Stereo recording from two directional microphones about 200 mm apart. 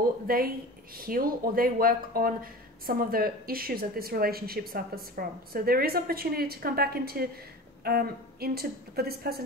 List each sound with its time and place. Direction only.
0.0 s a woman's voice: 45° right (ahead or behind)